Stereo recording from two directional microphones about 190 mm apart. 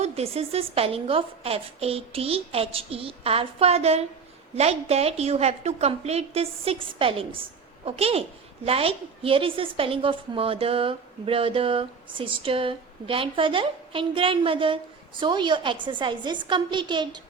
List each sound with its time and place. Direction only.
0.0 s a woman's voice: 35° right (ahead or behind)